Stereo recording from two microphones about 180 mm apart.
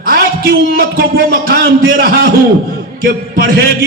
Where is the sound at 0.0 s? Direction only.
55° right (ahead or behind).